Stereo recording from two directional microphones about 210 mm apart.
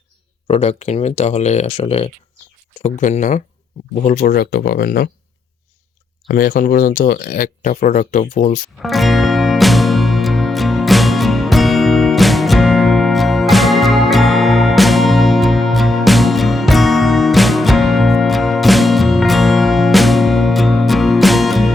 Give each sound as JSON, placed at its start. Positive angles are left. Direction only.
{"t": 0.4, "sound": "speech", "side_deg": 30}
{"t": 6.2, "sound": "speech", "side_deg": 45}
{"t": 8.8, "sound": "music", "side_deg": 0}